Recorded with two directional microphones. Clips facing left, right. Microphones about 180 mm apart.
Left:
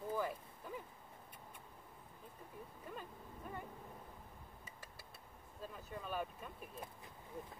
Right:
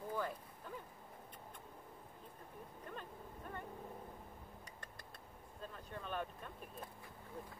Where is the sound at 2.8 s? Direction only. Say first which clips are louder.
Right 1 dB; 5° left (ahead or behind).